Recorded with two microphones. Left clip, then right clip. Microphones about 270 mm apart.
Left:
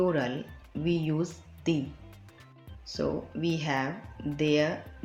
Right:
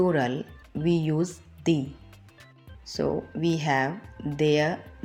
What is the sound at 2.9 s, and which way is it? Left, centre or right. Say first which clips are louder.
Speech: right 4 dB; right.